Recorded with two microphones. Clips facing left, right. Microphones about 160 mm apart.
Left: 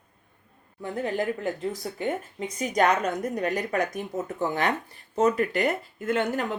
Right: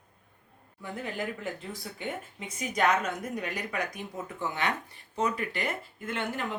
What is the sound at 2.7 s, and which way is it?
A woman's voice, 40° left (ahead or behind).